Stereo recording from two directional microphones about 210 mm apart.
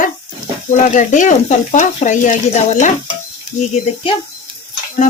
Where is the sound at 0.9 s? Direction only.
35° left (ahead or behind).